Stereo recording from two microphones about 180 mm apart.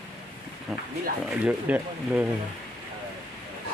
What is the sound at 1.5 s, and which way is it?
Speech, 10° right (ahead or behind).